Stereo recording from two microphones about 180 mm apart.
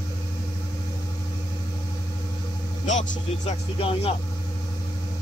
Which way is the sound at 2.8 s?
40° left (ahead or behind).